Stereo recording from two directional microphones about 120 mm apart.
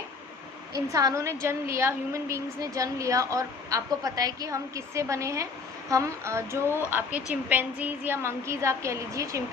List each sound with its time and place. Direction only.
0.7 s a woman's voice: 30° right (ahead or behind)